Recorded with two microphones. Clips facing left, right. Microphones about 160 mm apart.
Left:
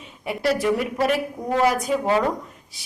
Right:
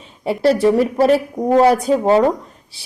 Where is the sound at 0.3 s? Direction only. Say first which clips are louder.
Right 7 dB; 30° right (ahead or behind).